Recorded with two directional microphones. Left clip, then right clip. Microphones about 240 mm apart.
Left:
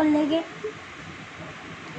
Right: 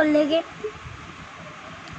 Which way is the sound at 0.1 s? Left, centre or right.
Right.